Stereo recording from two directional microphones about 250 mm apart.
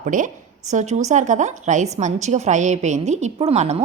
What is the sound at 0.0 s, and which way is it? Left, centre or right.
A woman's voice, right.